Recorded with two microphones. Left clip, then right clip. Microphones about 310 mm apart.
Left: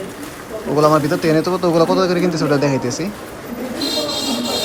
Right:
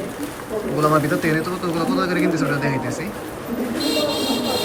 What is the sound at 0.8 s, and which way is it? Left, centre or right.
Speech, centre.